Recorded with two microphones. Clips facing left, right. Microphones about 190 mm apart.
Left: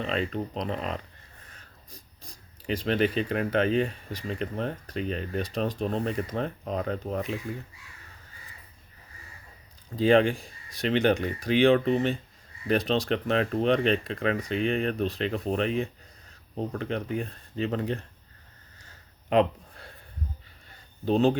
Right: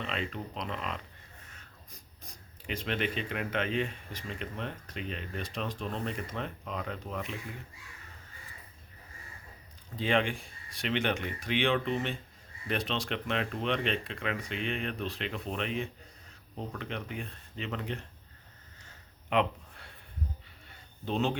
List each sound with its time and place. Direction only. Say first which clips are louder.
0.0 s speech: left 7 dB; 40° left (ahead or behind)
9.9 s speech: left 9 dB; 40° left (ahead or behind)
19.3 s a sound: left 6 dB; 40° left (ahead or behind)
21.0 s speech: left 8 dB; 40° left (ahead or behind)